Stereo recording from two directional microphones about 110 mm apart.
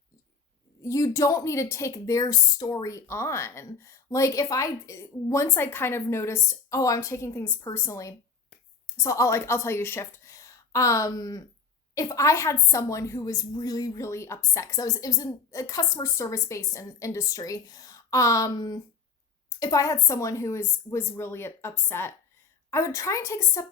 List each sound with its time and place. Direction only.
0.8 s a woman's voice: 30° left (ahead or behind)